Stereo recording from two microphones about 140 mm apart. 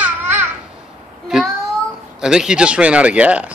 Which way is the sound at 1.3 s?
Centre (ahead or behind).